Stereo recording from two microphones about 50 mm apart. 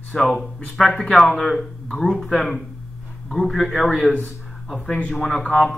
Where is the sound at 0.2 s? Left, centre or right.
Centre.